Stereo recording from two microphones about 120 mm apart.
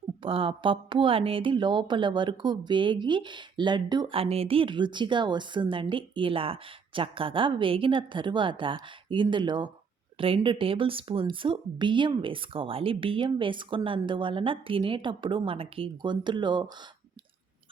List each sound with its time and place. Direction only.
0.2 s a woman's voice: 50° right (ahead or behind)
4.1 s a woman's voice: 55° right (ahead or behind)